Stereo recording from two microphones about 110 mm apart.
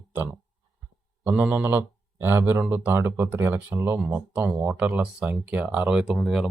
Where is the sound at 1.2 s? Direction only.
20° right (ahead or behind).